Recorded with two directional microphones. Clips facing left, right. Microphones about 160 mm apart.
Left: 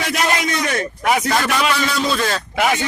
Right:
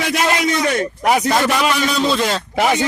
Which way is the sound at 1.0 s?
35° right (ahead or behind).